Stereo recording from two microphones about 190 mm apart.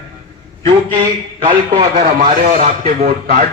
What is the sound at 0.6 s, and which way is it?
Speech, 25° right (ahead or behind).